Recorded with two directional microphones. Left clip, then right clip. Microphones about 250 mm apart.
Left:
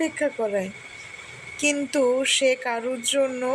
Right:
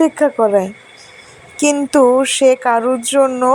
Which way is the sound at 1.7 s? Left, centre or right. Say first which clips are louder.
Right 12 dB; right.